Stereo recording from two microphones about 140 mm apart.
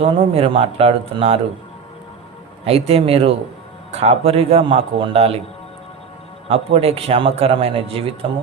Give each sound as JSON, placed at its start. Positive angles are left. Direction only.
{"t": 0.0, "sound": "a man's voice", "side_deg": -40}
{"t": 2.6, "sound": "a man's voice", "side_deg": -45}
{"t": 6.5, "sound": "a man's voice", "side_deg": -45}